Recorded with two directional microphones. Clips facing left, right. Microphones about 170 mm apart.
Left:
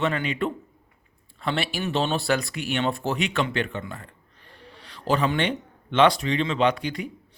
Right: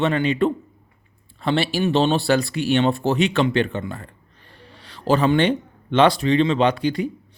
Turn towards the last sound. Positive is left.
turn(degrees=-30)  # may be behind; listen again after turning